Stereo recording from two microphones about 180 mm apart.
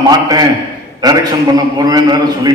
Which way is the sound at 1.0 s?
20° right (ahead or behind).